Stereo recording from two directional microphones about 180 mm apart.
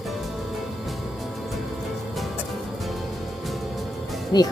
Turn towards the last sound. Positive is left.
turn(degrees=20)  # may be behind; listen again after turning